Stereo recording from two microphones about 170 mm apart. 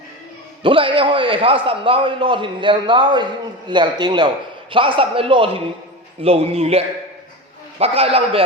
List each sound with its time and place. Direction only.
0.6 s a man's voice: 30° right (ahead or behind)